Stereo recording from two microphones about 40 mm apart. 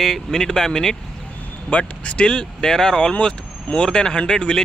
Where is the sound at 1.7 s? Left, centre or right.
Left.